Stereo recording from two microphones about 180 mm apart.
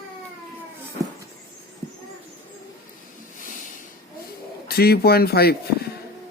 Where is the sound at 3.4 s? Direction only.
45° left (ahead or behind).